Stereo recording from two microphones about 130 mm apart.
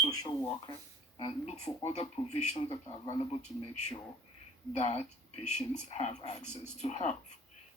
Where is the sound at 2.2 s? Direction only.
35° left (ahead or behind).